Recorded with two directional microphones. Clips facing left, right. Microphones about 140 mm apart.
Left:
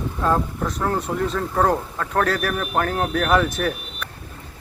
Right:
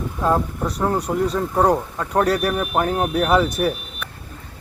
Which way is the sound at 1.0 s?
Centre (ahead or behind).